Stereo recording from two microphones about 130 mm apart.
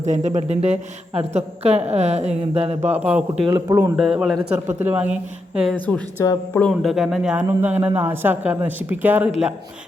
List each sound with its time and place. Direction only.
0.0 s a woman's voice: 65° right (ahead or behind)
2.9 s a man's voice: 10° right (ahead or behind)
3.5 s a man's voice: 25° right (ahead or behind)
3.9 s a man's voice: 5° right (ahead or behind)
5.8 s speech: 10° left (ahead or behind)
6.8 s a man's voice: centre (ahead or behind)